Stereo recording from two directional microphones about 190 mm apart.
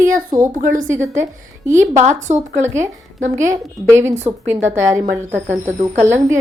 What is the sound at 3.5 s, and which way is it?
Speech, 15° right (ahead or behind).